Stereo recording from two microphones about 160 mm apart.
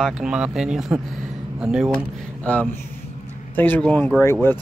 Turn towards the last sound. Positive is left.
turn(degrees=15)  # may be behind; listen again after turning